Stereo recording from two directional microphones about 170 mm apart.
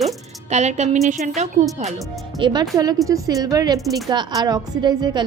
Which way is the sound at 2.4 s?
25° right (ahead or behind).